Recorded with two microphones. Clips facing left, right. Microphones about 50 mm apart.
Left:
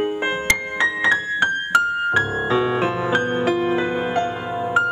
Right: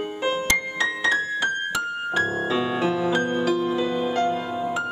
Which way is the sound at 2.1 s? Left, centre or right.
Left.